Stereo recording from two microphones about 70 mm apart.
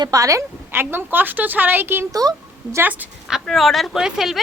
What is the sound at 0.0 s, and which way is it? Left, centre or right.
Speech, right.